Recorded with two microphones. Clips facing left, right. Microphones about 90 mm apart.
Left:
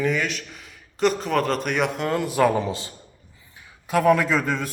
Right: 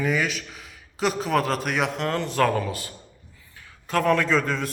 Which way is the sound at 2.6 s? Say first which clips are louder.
Left 2 dB; 25° left (ahead or behind).